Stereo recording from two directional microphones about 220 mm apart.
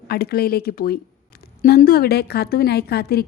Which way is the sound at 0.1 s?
45° left (ahead or behind).